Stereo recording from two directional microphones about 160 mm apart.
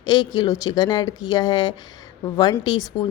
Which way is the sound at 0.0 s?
25° left (ahead or behind).